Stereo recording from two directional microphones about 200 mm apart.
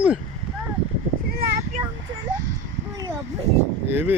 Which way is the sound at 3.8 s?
10° right (ahead or behind).